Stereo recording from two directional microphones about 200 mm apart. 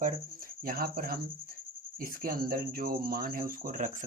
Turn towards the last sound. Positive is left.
turn(degrees=-40)  # may be behind; listen again after turning